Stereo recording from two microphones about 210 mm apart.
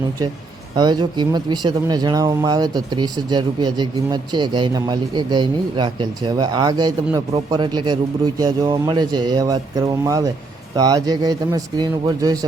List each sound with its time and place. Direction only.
0.8 s speech: 20° right (ahead or behind)